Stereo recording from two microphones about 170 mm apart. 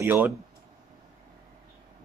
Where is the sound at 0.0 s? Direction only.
10° right (ahead or behind).